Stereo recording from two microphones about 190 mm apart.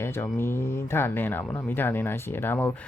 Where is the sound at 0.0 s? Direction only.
15° left (ahead or behind).